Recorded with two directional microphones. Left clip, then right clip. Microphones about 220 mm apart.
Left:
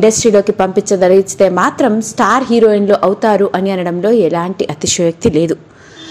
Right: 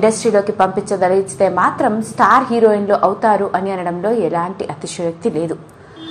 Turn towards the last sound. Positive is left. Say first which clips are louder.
# left 6 dB
turn(degrees=70)  # may be behind; listen again after turning